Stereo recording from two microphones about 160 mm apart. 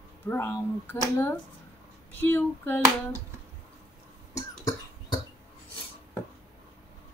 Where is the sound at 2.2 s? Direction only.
15° left (ahead or behind).